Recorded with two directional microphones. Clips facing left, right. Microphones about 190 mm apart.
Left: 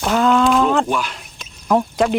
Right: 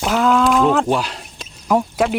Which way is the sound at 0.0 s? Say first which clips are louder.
Even; 5° right (ahead or behind).